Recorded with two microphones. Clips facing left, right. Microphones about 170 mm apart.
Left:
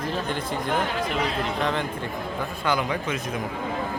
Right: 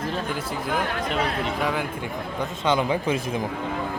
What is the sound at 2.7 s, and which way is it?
Speech, 30° right (ahead or behind).